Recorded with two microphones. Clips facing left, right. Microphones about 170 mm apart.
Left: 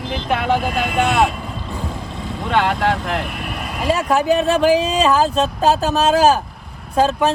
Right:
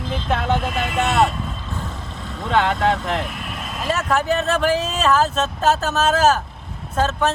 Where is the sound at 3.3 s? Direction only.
70° left (ahead or behind).